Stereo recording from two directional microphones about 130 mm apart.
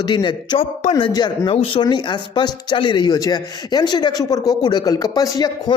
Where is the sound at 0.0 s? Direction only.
35° left (ahead or behind).